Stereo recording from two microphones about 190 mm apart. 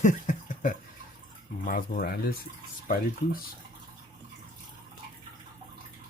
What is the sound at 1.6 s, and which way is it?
Speech, 45° left (ahead or behind).